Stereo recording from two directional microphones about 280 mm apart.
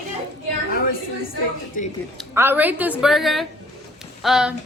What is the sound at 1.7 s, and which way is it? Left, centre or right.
Speech, left.